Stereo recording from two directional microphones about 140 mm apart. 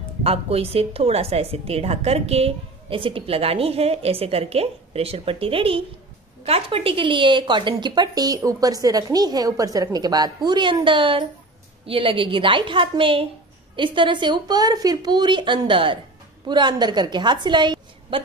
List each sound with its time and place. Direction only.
0.2 s a woman's voice: 45° right (ahead or behind)